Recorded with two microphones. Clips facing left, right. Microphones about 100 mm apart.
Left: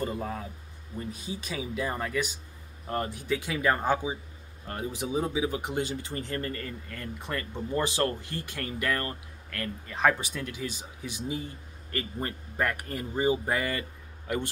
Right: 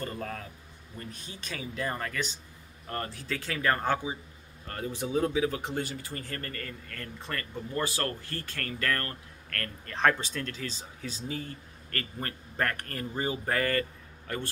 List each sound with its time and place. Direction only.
0.0 s speech: 10° left (ahead or behind)